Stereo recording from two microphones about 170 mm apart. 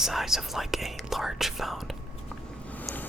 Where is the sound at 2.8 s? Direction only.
10° left (ahead or behind).